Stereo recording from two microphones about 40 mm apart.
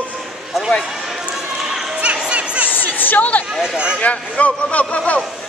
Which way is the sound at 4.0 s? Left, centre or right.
Left.